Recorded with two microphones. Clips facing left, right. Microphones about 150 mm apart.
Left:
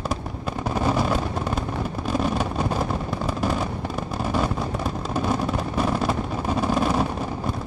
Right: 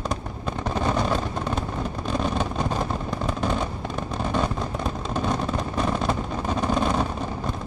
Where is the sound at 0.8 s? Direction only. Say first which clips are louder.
Left 1 dB; 5° left (ahead or behind).